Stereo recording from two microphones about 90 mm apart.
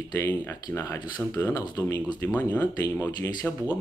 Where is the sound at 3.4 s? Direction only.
10° left (ahead or behind).